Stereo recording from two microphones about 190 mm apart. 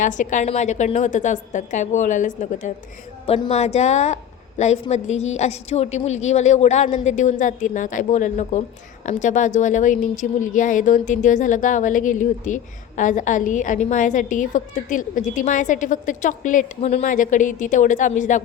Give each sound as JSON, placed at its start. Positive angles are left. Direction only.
{"t": 0.0, "sound": "a woman's voice", "side_deg": 40}